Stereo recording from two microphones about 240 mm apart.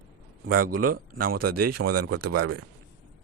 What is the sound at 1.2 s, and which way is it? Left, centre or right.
Speech, right.